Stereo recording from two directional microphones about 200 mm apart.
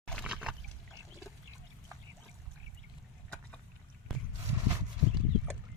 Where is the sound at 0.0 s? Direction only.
5° left (ahead or behind).